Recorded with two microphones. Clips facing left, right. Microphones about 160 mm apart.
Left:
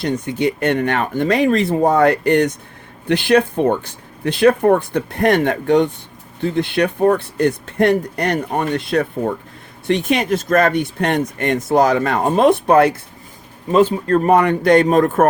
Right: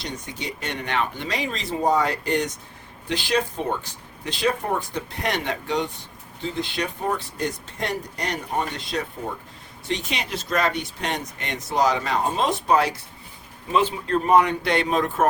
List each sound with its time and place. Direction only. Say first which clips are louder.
0.0 s speech: left 14 dB; 55° left (ahead or behind)
13.7 s speech: left 8 dB; 40° left (ahead or behind)